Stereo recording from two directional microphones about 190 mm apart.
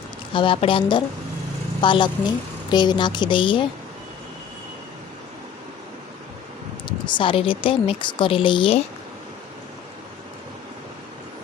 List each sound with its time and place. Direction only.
0.3 s speech: 25° left (ahead or behind)
6.8 s speech: 25° left (ahead or behind)